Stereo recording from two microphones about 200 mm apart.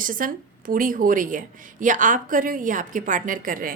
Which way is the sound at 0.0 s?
45° right (ahead or behind).